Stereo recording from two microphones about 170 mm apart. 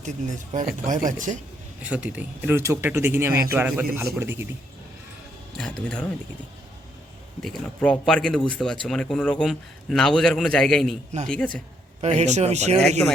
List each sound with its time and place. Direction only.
0.0 s speech: 45° right (ahead or behind)
1.8 s speech: 5° right (ahead or behind)
5.5 s speech: 5° left (ahead or behind)
7.4 s speech: 5° left (ahead or behind)
12.0 s speech: 40° right (ahead or behind)